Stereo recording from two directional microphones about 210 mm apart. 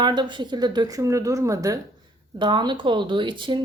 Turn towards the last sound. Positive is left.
turn(degrees=-25)  # may be behind; listen again after turning